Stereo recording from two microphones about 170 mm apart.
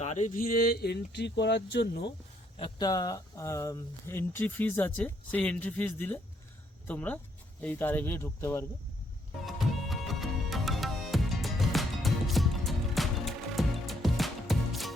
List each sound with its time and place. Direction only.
0.0 s speech: 45° left (ahead or behind); by 2.0 s 80° left
2.6 s speech: 25° left (ahead or behind)
9.5 s music: centre (ahead or behind)